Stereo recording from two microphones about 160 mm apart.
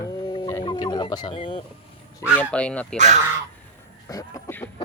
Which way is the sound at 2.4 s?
10° left (ahead or behind).